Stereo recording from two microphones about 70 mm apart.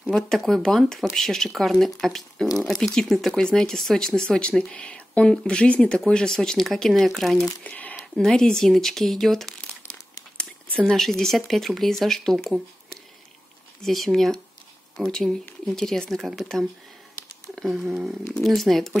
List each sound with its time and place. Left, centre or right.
0.1 s speech: centre
7.6 s speech: centre
8.0 s speech: centre
10.8 s speech: centre
13.8 s speech: centre